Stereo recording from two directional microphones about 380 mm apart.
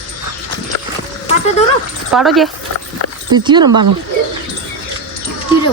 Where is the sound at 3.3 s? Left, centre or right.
Centre.